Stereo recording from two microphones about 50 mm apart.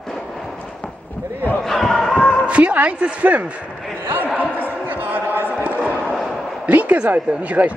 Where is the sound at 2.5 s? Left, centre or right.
Right.